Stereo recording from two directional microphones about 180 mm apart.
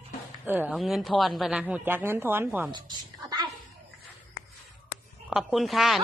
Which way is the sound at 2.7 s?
25° right (ahead or behind).